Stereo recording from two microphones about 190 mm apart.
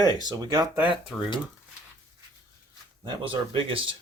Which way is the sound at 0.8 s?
Centre (ahead or behind).